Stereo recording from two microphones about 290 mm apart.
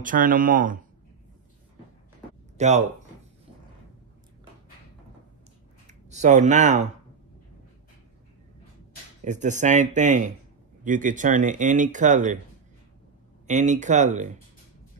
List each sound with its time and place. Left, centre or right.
0.0 s speech: right
2.5 s speech: right
5.9 s speech: right
9.2 s speech: right
13.5 s speech: right